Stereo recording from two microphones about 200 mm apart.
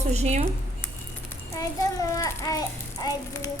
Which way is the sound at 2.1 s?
15° left (ahead or behind).